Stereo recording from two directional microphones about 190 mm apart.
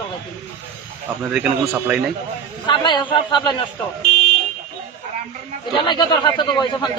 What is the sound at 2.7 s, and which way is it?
Speech, 25° left (ahead or behind).